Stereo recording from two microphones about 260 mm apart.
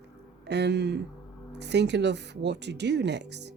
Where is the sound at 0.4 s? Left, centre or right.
Right.